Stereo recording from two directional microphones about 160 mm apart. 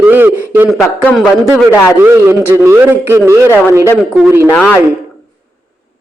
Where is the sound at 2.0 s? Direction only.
15° right (ahead or behind).